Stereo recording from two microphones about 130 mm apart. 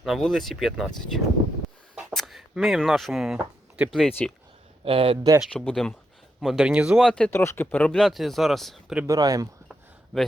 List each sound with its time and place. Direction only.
0.0 s speech: centre (ahead or behind)
2.0 s a sound: centre (ahead or behind)
4.9 s speech: 45° right (ahead or behind)
5.4 s speech: 5° left (ahead or behind)
7.3 s speech: 20° left (ahead or behind); by 9.0 s centre (ahead or behind)
9.0 s speech: 25° right (ahead or behind)
10.1 s a man's voice: centre (ahead or behind)